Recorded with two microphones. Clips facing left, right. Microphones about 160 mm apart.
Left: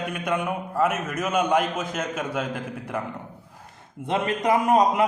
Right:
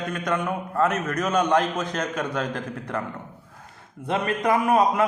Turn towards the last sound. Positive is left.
turn(degrees=20)  # may be behind; listen again after turning